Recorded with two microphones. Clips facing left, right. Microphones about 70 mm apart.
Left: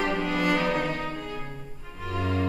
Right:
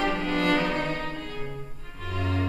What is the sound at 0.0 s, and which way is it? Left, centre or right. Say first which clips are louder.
Music: even; centre.